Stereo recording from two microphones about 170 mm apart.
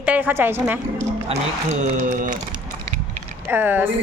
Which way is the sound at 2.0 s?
50° right (ahead or behind).